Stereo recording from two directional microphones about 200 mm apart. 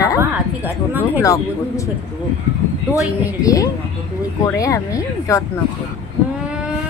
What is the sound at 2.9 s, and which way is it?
Speech, 15° left (ahead or behind).